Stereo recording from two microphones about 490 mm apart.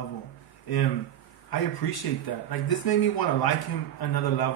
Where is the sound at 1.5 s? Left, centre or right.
Left.